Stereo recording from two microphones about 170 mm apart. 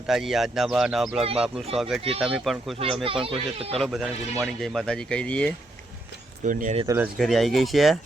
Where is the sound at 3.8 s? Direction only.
Centre (ahead or behind).